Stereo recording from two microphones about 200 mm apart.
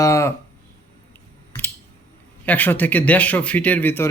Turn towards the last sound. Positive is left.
turn(degrees=10)  # may be behind; listen again after turning